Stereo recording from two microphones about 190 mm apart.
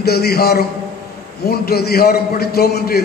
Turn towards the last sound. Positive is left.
turn(degrees=55)  # may be behind; listen again after turning